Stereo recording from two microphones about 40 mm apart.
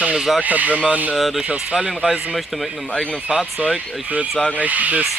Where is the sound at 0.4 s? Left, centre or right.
Right.